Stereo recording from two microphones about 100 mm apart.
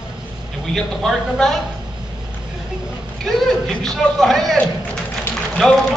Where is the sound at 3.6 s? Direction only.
5° left (ahead or behind).